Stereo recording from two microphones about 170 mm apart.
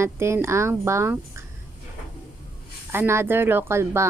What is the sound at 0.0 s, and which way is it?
A woman's voice, 15° right (ahead or behind).